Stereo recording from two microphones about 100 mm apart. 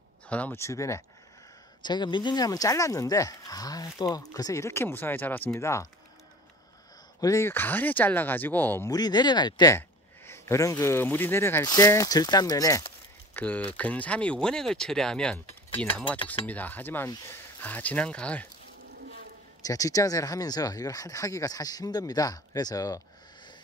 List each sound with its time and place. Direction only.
0.3 s speech: 15° left (ahead or behind)
0.6 s speech: 30° left (ahead or behind)
1.8 s speech: 50° left (ahead or behind); by 5.5 s 20° left (ahead or behind)
5.6 s speech: 30° left (ahead or behind)
7.2 s speech: 30° left (ahead or behind)
7.5 s speech: 20° left (ahead or behind)
8.9 s speech: 45° left (ahead or behind)
9.8 s speech: 25° left (ahead or behind)
11.6 s speech: 40° left (ahead or behind)
13.3 s speech: 15° left (ahead or behind)
19.6 s speech: 35° left (ahead or behind)